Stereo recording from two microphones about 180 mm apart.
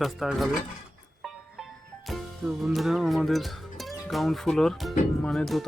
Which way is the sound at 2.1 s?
Centre (ahead or behind).